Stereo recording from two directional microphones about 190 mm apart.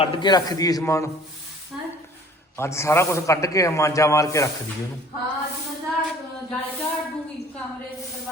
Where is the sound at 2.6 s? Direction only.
15° left (ahead or behind).